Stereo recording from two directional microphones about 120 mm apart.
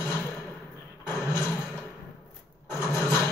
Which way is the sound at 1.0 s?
20° left (ahead or behind).